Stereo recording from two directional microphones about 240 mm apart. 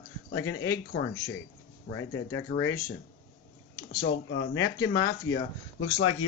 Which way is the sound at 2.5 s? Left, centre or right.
Left.